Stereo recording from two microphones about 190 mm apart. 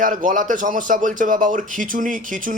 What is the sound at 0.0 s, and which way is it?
Speech, 45° right (ahead or behind).